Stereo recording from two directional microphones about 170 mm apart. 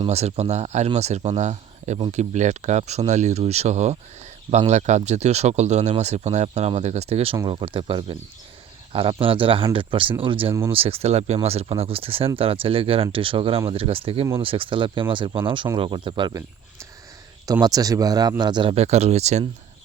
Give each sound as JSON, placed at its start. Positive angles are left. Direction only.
{"t": 0.0, "sound": "speech", "side_deg": -40}
{"t": 17.4, "sound": "speech", "side_deg": -20}